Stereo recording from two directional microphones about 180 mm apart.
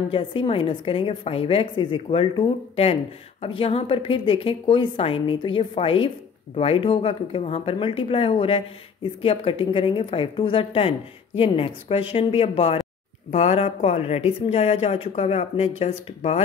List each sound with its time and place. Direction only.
0.1 s a woman's voice: 30° left (ahead or behind)